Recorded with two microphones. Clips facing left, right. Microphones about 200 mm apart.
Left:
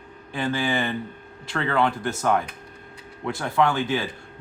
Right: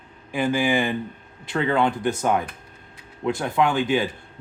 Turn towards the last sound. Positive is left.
turn(degrees=-15)  # may be behind; listen again after turning